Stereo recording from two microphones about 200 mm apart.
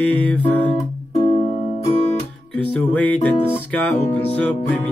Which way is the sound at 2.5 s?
5° left (ahead or behind).